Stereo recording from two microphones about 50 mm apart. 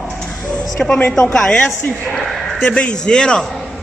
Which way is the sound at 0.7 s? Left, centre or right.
Centre.